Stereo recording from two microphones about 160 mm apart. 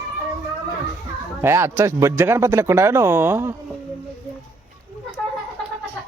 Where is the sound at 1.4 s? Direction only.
15° right (ahead or behind).